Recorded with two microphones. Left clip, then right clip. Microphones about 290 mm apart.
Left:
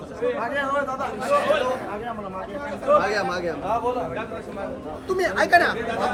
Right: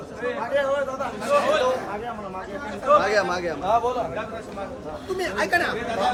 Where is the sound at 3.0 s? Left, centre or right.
Centre.